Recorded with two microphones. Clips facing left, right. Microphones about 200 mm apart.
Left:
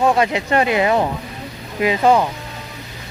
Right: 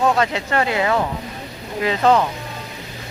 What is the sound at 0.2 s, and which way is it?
Speech, 15° left (ahead or behind).